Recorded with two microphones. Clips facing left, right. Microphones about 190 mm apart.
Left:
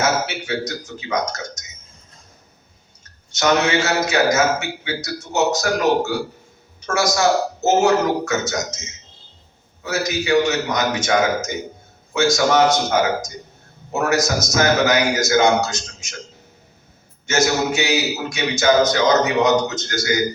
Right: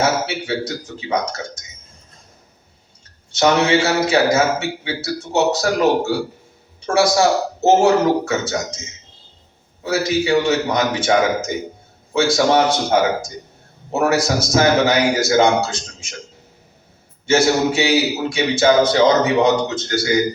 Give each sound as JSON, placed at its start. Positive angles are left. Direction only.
{"t": 0.0, "sound": "a man's voice", "side_deg": -30}
{"t": 3.3, "sound": "a man's voice", "side_deg": -30}
{"t": 9.8, "sound": "a man's voice", "side_deg": -30}
{"t": 17.2, "sound": "a man's voice", "side_deg": -30}